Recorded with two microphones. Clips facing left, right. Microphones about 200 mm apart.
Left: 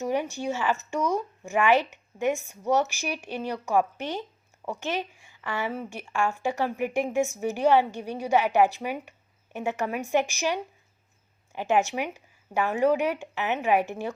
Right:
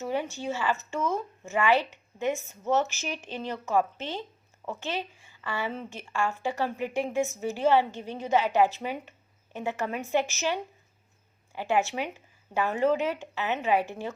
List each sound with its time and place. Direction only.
0.0 s speech: 15° left (ahead or behind)